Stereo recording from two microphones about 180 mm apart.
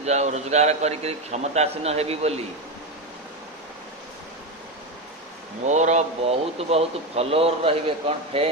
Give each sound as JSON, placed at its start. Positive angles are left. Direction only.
{"t": 0.0, "sound": "speech", "side_deg": -40}
{"t": 5.6, "sound": "speech", "side_deg": -40}